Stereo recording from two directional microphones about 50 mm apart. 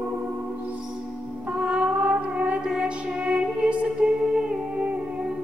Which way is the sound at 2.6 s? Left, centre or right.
Centre.